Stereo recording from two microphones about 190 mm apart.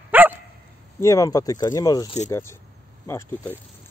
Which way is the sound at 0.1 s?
10° right (ahead or behind).